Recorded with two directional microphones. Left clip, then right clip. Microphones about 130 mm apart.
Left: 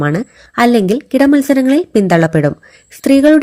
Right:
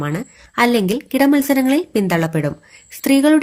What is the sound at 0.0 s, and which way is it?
Speech, 50° left (ahead or behind).